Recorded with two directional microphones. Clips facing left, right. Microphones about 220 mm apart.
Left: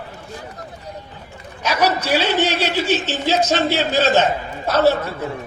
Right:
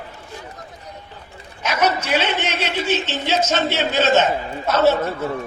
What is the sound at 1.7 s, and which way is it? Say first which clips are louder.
Speech: left 1 dB; 35° left (ahead or behind).